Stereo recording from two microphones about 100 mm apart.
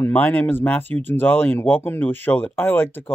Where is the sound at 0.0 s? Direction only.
20° left (ahead or behind).